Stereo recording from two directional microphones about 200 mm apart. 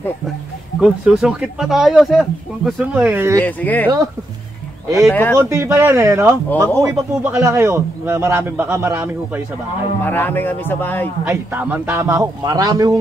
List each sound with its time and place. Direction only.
0.7 s speech: 5° right (ahead or behind)
3.3 s speech: 10° left (ahead or behind)
5.1 s speech: 10° left (ahead or behind)
5.4 s a man's voice: 15° right (ahead or behind)
10.0 s speech: 10° left (ahead or behind)
11.2 s a man's voice: 10° right (ahead or behind)